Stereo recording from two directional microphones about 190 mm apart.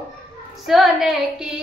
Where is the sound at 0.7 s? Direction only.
Centre (ahead or behind).